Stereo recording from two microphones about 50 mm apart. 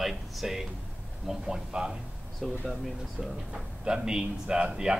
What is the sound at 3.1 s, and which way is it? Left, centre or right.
Speech, centre.